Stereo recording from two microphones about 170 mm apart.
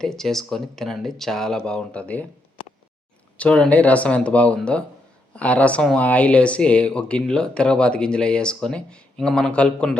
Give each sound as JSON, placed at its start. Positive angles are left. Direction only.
{"t": 0.0, "sound": "speech", "side_deg": 5}
{"t": 3.3, "sound": "speech", "side_deg": 5}